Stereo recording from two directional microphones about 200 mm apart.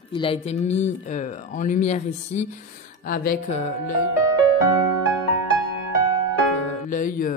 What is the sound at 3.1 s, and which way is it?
Speech, 45° left (ahead or behind).